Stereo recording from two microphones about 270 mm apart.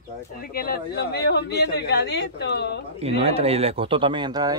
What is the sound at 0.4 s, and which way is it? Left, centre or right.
Speech, left.